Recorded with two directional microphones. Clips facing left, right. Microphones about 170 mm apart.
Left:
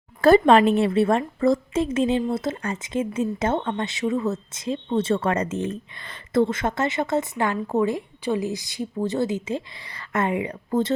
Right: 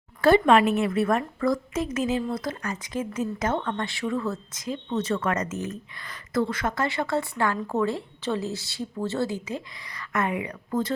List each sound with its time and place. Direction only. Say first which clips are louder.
0.2 s a woman's voice: left 3 dB; 40° left (ahead or behind)